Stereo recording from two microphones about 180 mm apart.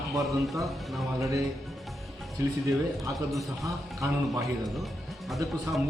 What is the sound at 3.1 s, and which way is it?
A man's voice, centre (ahead or behind).